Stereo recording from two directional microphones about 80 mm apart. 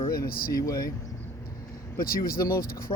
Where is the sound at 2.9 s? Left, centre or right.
Left.